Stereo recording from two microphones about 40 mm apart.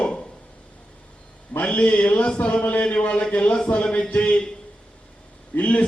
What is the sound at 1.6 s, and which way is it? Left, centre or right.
A man's voice, left.